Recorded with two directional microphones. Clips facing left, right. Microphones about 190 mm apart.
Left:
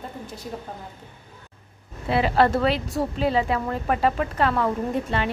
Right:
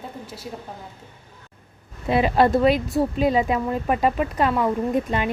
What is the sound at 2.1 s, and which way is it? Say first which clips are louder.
Speech: right 2 dB; 15° right (ahead or behind).